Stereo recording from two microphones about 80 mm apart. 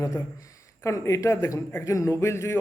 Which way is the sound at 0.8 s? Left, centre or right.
Left.